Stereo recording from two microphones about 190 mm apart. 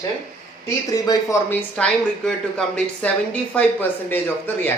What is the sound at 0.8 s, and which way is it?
Speech, 20° left (ahead or behind).